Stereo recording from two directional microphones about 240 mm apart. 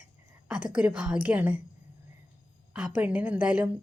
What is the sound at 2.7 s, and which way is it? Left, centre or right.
Speech, centre.